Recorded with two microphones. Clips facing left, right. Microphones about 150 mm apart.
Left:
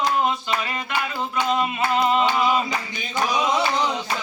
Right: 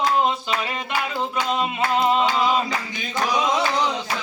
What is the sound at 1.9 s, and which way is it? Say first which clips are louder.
Hands: even; 20° right (ahead or behind).